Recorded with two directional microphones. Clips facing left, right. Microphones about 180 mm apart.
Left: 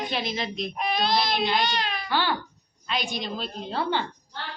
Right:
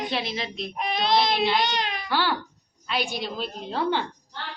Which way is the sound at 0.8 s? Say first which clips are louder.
Right 2 dB; 20° right (ahead or behind).